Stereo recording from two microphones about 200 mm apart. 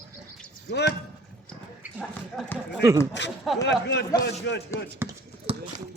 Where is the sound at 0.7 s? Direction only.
55° left (ahead or behind).